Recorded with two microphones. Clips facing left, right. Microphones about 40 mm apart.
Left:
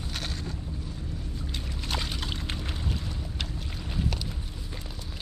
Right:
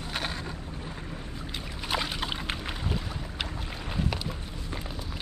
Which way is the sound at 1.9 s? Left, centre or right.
Centre.